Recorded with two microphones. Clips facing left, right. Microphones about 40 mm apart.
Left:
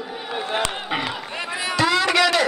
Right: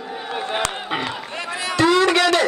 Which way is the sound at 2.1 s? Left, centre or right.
Centre.